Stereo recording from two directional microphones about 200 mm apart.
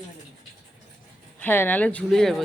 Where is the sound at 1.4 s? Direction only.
10° left (ahead or behind).